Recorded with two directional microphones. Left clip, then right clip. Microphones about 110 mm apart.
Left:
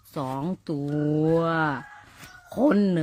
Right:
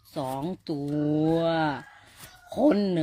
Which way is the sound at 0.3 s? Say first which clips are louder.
Left 1 dB; 30° left (ahead or behind).